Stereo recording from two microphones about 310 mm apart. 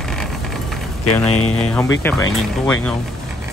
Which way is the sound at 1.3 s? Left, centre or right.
Left.